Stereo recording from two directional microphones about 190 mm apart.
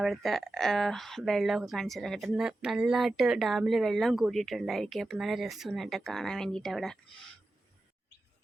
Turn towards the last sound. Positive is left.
turn(degrees=0)  # may be behind; listen again after turning